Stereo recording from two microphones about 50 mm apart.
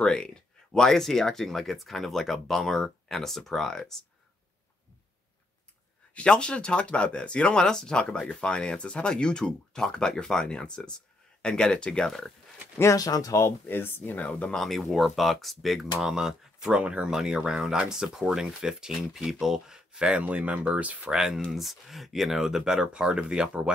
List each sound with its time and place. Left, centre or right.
0.0 s speech: centre
6.1 s speech: centre
12.7 s speech: left
13.7 s speech: left
14.5 s speech: centre
16.8 s speech: right
17.1 s speech: centre; by 21.1 s right
21.1 s speech: centre